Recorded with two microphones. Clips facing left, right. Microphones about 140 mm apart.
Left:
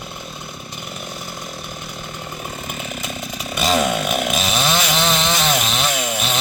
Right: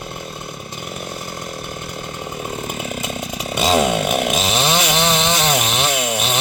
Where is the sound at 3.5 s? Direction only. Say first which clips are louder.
Right 2 dB; 25° right (ahead or behind).